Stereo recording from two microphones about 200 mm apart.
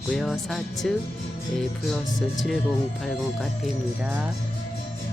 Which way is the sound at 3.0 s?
Centre (ahead or behind).